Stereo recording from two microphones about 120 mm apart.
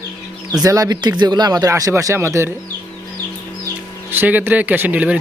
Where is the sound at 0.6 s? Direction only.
30° right (ahead or behind).